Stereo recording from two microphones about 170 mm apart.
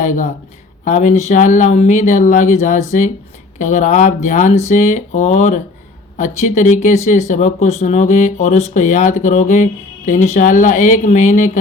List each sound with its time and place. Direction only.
0.0 s speech: 45° left (ahead or behind)